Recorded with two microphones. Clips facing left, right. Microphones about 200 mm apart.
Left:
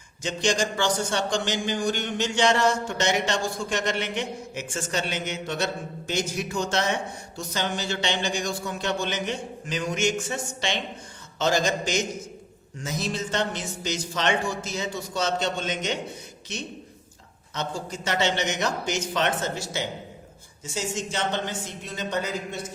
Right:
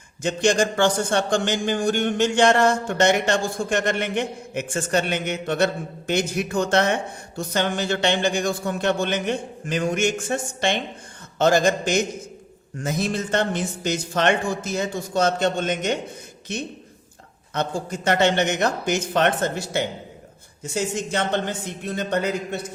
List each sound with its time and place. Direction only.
0.2 s a man's voice: 55° right (ahead or behind)